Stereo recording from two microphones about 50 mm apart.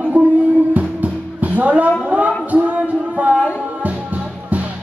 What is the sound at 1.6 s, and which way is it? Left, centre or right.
Speech, right.